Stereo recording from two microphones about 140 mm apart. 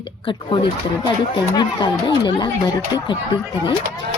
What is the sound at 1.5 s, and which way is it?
Speech, 30° left (ahead or behind).